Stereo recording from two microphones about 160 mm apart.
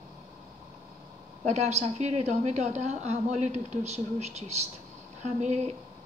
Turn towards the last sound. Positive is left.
turn(degrees=-45)  # may be behind; listen again after turning